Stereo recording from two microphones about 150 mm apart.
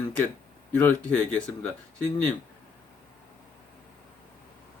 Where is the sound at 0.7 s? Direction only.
10° left (ahead or behind).